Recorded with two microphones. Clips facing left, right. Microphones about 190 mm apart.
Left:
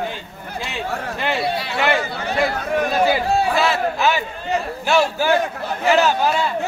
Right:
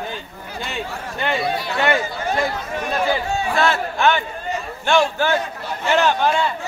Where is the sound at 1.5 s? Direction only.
65° left (ahead or behind).